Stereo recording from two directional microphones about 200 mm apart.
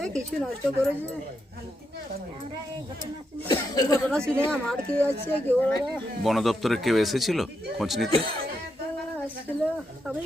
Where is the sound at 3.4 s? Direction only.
20° left (ahead or behind).